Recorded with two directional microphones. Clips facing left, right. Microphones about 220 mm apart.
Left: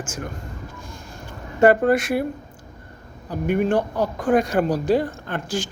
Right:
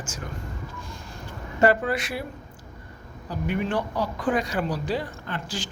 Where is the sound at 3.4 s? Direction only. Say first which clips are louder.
Left 7 dB; 50° left (ahead or behind).